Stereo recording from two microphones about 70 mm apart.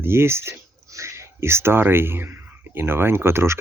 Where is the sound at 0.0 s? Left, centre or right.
Right.